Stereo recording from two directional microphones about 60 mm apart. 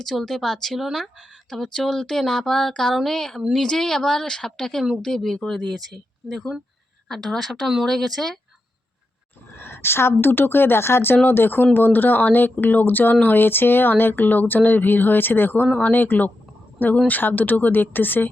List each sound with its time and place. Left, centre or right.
0.0 s speech: centre
9.5 s a woman's voice: left